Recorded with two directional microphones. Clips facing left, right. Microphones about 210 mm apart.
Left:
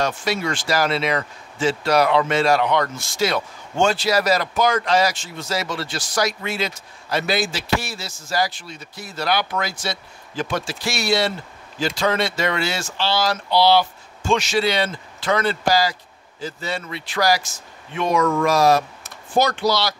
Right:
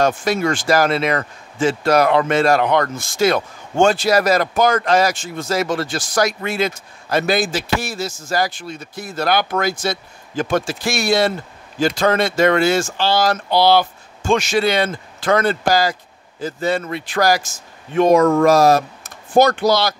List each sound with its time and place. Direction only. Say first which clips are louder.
0.0 s speech: right 5 dB; 50° right (ahead or behind)